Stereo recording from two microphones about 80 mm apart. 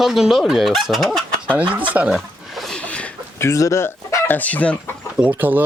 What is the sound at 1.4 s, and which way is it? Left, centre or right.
Speech, centre.